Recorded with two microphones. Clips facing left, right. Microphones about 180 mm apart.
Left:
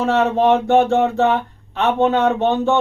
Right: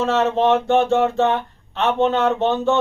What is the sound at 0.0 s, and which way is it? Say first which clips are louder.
Speech: left 2 dB; 15° left (ahead or behind).